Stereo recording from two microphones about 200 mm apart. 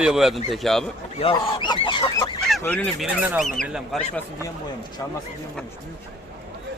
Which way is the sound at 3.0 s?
5° right (ahead or behind).